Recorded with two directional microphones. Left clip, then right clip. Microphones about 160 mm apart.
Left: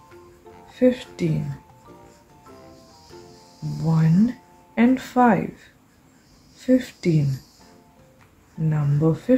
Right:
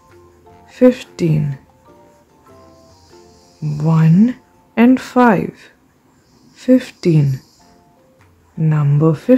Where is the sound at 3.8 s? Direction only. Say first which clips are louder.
Right 7 dB; 45° right (ahead or behind).